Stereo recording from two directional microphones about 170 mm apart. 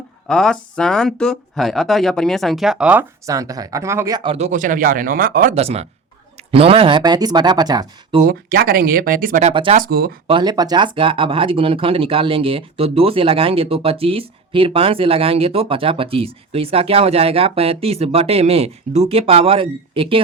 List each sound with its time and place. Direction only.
0.3 s speech: 5° left (ahead or behind); by 4.4 s 25° right (ahead or behind)
4.4 s speech: 45° right (ahead or behind)
5.5 s speech: 40° right (ahead or behind)
8.2 s speech: 60° right (ahead or behind)
9.4 s speech: 35° right (ahead or behind)
9.7 s speech: 60° right (ahead or behind)
10.2 s speech: 25° right (ahead or behind)